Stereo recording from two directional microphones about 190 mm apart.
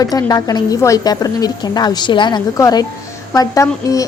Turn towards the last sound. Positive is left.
turn(degrees=15)  # may be behind; listen again after turning